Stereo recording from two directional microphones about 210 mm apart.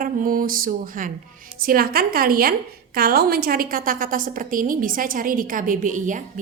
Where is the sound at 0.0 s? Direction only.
40° right (ahead or behind).